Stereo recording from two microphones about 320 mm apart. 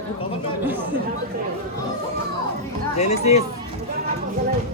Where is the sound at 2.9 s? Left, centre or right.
Centre.